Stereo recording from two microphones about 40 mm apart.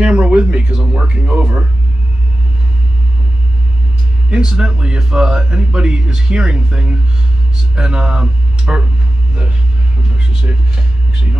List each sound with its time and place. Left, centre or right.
0.0 s speech: right
4.3 s speech: right